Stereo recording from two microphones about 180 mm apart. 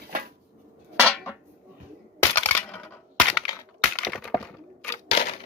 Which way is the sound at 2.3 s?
10° left (ahead or behind).